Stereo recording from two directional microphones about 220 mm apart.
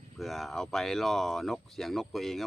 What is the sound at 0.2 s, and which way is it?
Speech, centre (ahead or behind).